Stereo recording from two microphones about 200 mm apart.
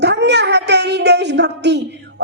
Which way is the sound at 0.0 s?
55° right (ahead or behind).